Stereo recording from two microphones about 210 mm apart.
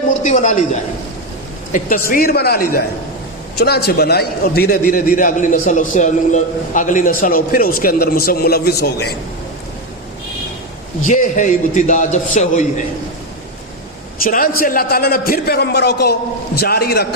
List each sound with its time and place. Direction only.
0.1 s a woman's voice: 35° left (ahead or behind)
11.0 s a man's voice: 35° left (ahead or behind)
14.3 s a man's voice: 40° left (ahead or behind)